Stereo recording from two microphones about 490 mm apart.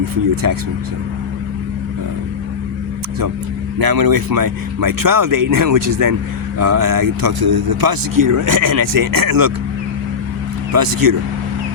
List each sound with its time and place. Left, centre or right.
0.4 s speech: right
3.8 s speech: right
10.7 s speech: right